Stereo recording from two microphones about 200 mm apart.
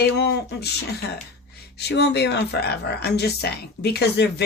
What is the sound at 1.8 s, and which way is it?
Speech, 55° left (ahead or behind).